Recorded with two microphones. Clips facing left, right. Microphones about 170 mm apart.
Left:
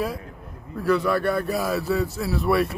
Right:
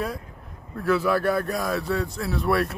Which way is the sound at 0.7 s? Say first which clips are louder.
Left 1 dB; centre (ahead or behind).